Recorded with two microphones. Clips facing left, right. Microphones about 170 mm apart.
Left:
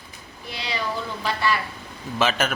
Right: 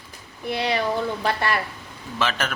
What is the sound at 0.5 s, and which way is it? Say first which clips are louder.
Speech: right 6 dB; 55° right (ahead or behind).